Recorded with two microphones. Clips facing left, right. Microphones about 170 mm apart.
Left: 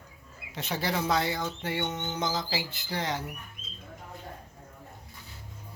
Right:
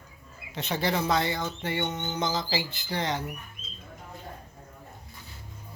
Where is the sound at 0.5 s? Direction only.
5° left (ahead or behind).